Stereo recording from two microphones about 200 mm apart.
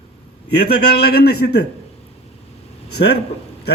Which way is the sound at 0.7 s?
55° left (ahead or behind).